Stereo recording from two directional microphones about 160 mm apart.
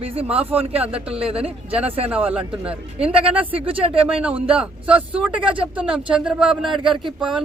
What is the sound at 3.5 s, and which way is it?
Speech, 35° right (ahead or behind).